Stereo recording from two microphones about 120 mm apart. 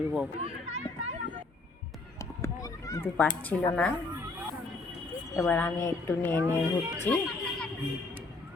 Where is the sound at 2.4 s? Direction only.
25° left (ahead or behind).